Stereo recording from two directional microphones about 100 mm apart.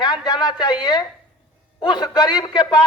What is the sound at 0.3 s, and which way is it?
A man's voice, 40° left (ahead or behind).